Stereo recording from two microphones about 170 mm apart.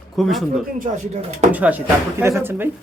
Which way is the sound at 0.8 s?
45° right (ahead or behind).